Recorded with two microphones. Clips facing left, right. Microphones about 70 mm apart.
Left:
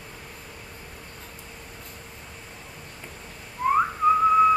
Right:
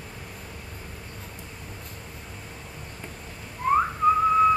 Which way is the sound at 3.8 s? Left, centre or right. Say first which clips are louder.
Left 2 dB; centre.